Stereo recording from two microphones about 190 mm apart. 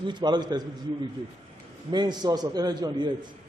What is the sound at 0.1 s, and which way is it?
Speech, 25° right (ahead or behind).